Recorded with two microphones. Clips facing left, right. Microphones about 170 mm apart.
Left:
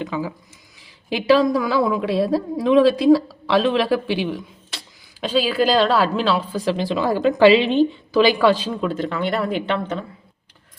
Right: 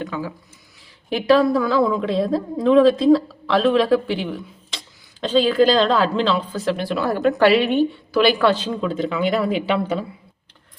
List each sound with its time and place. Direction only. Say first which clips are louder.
0.0 s a woman's voice: left 2 dB; 15° left (ahead or behind); by 10.1 s 5° right (ahead or behind)